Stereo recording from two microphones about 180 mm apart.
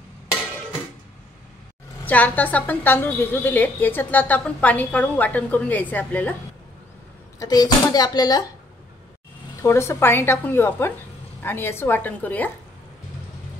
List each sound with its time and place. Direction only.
2.0 s a woman's voice: 10° left (ahead or behind)
7.3 s speech: 20° left (ahead or behind)
9.6 s a woman's voice: 15° left (ahead or behind)